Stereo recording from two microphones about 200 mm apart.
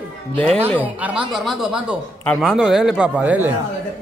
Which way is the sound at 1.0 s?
5° right (ahead or behind).